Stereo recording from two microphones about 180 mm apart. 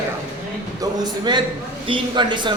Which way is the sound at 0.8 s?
25° right (ahead or behind).